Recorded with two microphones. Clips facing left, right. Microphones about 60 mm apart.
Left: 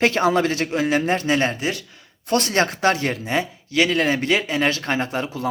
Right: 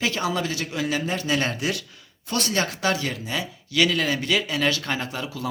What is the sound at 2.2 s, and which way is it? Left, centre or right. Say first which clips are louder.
Speech: left 6 dB; left.